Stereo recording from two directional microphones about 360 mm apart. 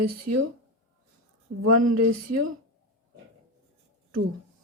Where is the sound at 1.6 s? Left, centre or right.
Right.